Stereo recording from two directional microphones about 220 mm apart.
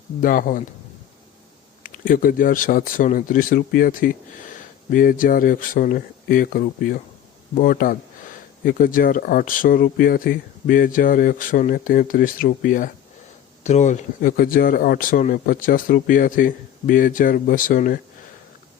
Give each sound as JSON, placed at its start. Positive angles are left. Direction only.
{"t": 0.2, "sound": "speech", "side_deg": 40}
{"t": 1.8, "sound": "speech", "side_deg": 40}